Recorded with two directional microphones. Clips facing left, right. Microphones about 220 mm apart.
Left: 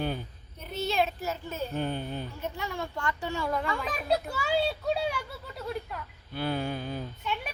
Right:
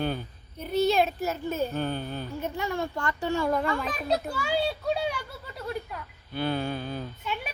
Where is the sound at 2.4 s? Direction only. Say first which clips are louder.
Right 8 dB; 45° right (ahead or behind).